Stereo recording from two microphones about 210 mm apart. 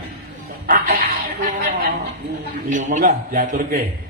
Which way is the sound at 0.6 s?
45° right (ahead or behind).